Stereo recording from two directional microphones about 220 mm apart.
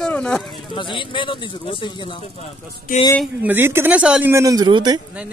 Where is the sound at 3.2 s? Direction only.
10° right (ahead or behind).